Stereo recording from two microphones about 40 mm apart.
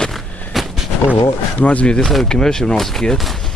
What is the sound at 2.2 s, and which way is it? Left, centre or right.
Speech, centre.